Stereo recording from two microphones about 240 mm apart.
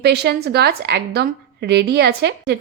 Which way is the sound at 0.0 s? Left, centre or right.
Right.